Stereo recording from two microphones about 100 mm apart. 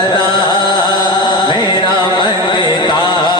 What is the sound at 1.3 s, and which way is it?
Music, 50° left (ahead or behind).